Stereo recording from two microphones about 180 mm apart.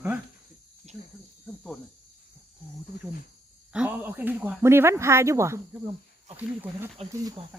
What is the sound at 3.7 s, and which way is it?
Speech, 10° right (ahead or behind).